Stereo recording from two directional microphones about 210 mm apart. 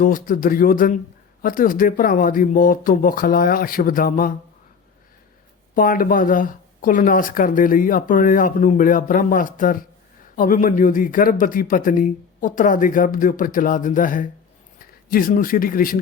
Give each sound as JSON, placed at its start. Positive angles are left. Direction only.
{"t": 0.0, "sound": "speech", "side_deg": 40}
{"t": 5.7, "sound": "speech", "side_deg": 40}